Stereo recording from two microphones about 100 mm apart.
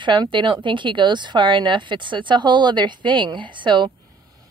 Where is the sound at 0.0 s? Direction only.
50° right (ahead or behind).